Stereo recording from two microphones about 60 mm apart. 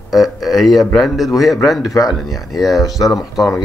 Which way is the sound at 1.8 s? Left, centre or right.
Left.